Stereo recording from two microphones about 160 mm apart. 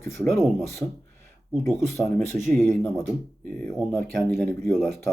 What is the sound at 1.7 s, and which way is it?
Speech, centre (ahead or behind).